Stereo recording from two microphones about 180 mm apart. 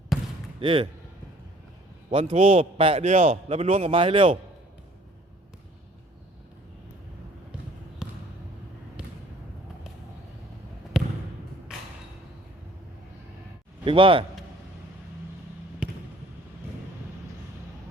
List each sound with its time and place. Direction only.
0.1 s basketball bounce: centre (ahead or behind)
0.6 s speech: 30° right (ahead or behind)
2.0 s a man's voice: 35° right (ahead or behind)
8.0 s basketball bounce: 5° right (ahead or behind)
10.9 s trickle: 5° right (ahead or behind)
11.7 s creak: 5° right (ahead or behind)
13.8 s speech: 30° right (ahead or behind)
15.8 s fireworks: 5° right (ahead or behind)